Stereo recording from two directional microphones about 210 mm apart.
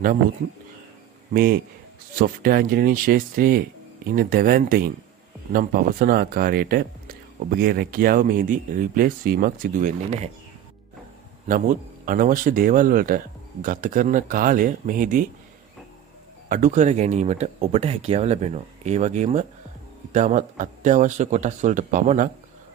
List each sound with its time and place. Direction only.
1.3 s speech: 45° right (ahead or behind)
11.4 s a man's voice: 40° right (ahead or behind)
16.4 s a man's voice: 35° right (ahead or behind)